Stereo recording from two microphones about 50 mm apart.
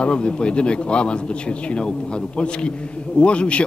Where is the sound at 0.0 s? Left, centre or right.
Centre.